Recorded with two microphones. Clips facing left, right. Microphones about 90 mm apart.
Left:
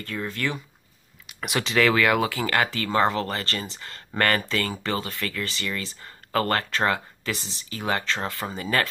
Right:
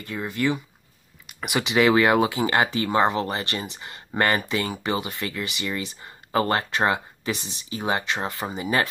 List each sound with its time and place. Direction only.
0.0 s speech: 15° right (ahead or behind)
1.2 s a sound: 5° right (ahead or behind)
1.7 s speech: 20° right (ahead or behind)